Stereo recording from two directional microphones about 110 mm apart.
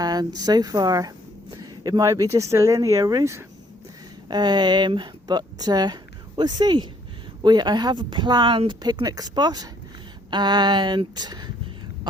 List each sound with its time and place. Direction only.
0.0 s speech: 35° right (ahead or behind)
4.3 s speech: 40° right (ahead or behind)